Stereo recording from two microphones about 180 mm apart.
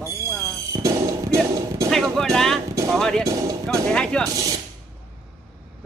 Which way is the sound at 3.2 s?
20° right (ahead or behind).